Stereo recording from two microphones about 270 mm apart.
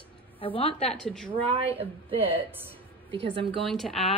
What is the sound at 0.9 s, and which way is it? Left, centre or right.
Speech, centre.